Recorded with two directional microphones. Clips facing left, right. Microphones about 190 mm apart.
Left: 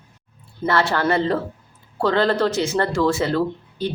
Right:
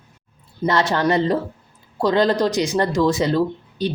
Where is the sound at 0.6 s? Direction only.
20° right (ahead or behind).